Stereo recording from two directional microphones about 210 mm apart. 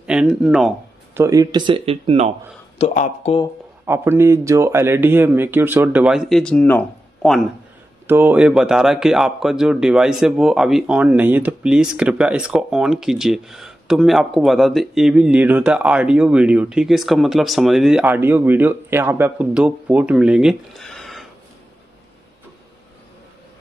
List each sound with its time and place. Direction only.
0.0 s a sound: 5° right (ahead or behind)
1.2 s speech: 15° right (ahead or behind)
2.8 s speech: 30° left (ahead or behind)
3.8 s speech: 10° right (ahead or behind)
8.1 s speech: 10° right (ahead or behind)